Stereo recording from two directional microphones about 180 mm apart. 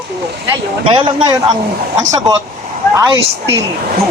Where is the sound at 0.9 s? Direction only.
25° right (ahead or behind).